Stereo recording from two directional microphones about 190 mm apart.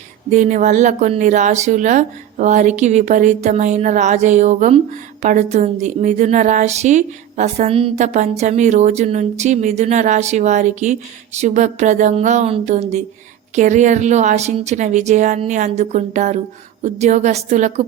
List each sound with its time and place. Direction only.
0.3 s speech: 40° right (ahead or behind)